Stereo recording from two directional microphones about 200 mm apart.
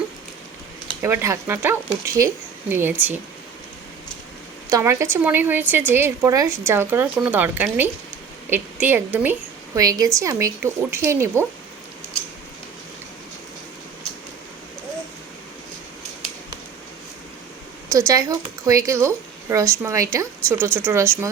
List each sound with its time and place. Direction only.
1.0 s speech: 15° right (ahead or behind)
4.7 s a woman's voice: 15° right (ahead or behind)
17.9 s speech: 15° right (ahead or behind)